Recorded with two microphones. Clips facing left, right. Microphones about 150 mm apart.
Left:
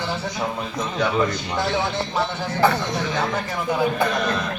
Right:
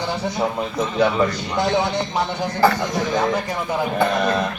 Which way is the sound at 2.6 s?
Centre (ahead or behind).